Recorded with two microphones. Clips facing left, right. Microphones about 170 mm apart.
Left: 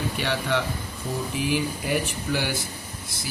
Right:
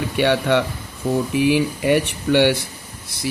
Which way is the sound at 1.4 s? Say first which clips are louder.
Right 7 dB; 70° right (ahead or behind).